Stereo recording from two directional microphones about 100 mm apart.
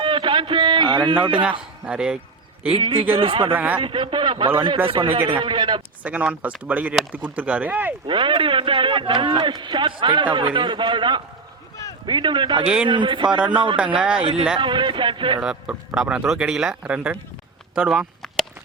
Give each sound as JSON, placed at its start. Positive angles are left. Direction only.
{"t": 0.0, "sound": "a sound", "side_deg": -55}
{"t": 1.9, "sound": "speech", "side_deg": -10}
{"t": 2.7, "sound": "speech", "side_deg": -60}
{"t": 3.5, "sound": "speech", "side_deg": -15}
{"t": 3.8, "sound": "speech", "side_deg": -60}
{"t": 6.0, "sound": "speech", "side_deg": -15}
{"t": 8.0, "sound": "a man's voice", "side_deg": -55}
{"t": 12.6, "sound": "speech", "side_deg": -10}
{"t": 12.9, "sound": "a man's voice", "side_deg": -55}
{"t": 14.2, "sound": "speech", "side_deg": -70}
{"t": 14.6, "sound": "a man's voice", "side_deg": -50}
{"t": 15.4, "sound": "speech", "side_deg": -10}